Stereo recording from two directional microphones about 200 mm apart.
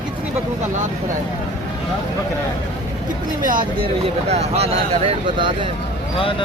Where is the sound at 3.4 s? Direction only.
45° right (ahead or behind).